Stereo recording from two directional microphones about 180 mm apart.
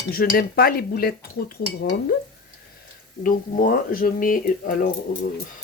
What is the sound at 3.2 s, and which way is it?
Speech, 50° left (ahead or behind).